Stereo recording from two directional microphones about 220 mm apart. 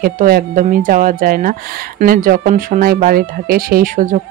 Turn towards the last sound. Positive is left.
turn(degrees=-35)  # may be behind; listen again after turning